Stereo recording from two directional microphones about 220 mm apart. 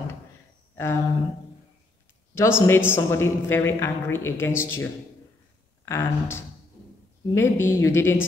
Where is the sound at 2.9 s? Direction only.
10° left (ahead or behind).